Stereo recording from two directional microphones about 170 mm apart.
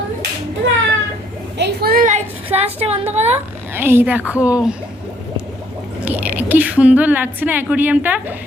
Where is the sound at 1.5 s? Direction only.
75° right (ahead or behind); by 2.2 s 50° right (ahead or behind).